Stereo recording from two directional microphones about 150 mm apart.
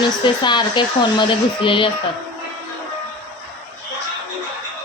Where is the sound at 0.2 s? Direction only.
30° left (ahead or behind).